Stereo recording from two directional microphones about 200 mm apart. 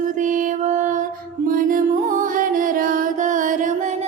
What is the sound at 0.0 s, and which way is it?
Music, 40° right (ahead or behind).